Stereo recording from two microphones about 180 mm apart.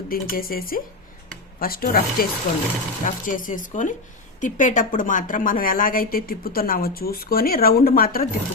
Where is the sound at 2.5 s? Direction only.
45° left (ahead or behind).